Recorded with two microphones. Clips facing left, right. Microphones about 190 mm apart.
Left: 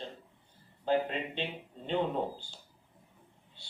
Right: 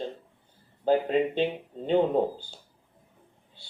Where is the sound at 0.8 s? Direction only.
40° right (ahead or behind).